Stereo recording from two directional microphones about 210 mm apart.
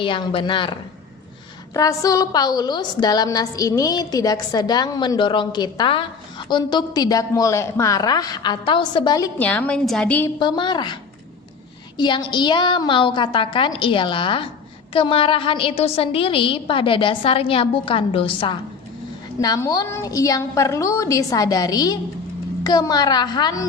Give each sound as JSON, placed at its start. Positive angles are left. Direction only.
{"t": 0.0, "sound": "a woman's voice", "side_deg": 25}
{"t": 10.4, "sound": "a woman's voice", "side_deg": 20}
{"t": 11.9, "sound": "a woman's voice", "side_deg": 20}